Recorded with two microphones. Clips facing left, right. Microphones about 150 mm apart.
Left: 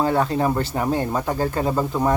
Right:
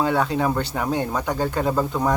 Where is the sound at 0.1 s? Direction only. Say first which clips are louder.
Left 1 dB; centre (ahead or behind).